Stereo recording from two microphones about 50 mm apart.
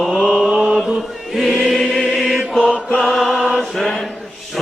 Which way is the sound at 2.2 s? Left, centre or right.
Centre.